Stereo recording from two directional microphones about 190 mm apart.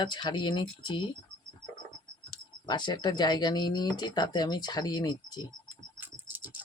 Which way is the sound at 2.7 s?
25° left (ahead or behind).